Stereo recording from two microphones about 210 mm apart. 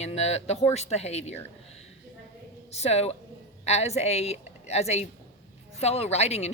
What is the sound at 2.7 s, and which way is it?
A woman's voice, 30° left (ahead or behind).